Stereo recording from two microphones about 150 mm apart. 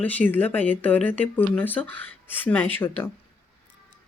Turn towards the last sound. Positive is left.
turn(degrees=15)  # may be behind; listen again after turning